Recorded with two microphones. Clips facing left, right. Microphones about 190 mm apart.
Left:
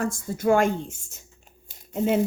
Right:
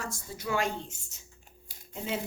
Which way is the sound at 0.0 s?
50° left (ahead or behind).